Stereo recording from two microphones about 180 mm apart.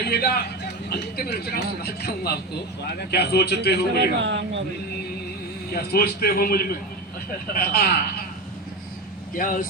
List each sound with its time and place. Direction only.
0.0 s speech: 65° left (ahead or behind)
4.2 s speech: 90° right
5.7 s speech: 60° left (ahead or behind)
7.7 s speech: 60° left (ahead or behind)
9.3 s speech: 50° left (ahead or behind)